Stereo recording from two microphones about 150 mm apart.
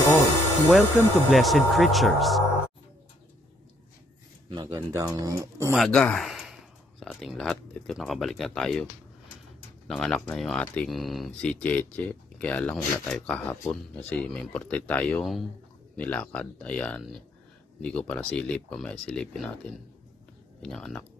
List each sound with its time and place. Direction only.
0.7 s speech: centre (ahead or behind)
4.5 s speech: 30° right (ahead or behind)
5.8 s speech: 5° left (ahead or behind)
9.8 s speech: 5° left (ahead or behind)